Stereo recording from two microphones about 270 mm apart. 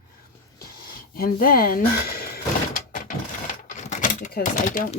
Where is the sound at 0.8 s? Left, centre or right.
Left.